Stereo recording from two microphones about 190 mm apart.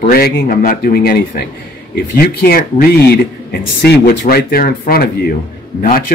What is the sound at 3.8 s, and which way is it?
Speech, 60° left (ahead or behind).